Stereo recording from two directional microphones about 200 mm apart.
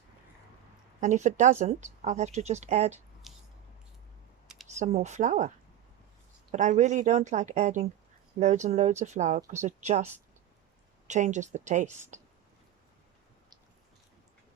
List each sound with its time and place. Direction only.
1.0 s speech: 35° right (ahead or behind)
3.3 s a sound: centre (ahead or behind)
4.7 s speech: 35° right (ahead or behind)
6.5 s speech: 35° right (ahead or behind)
11.1 s speech: 35° right (ahead or behind)